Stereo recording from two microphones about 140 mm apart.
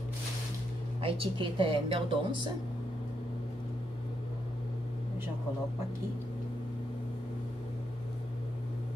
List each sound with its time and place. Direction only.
1.0 s speech: 40° right (ahead or behind)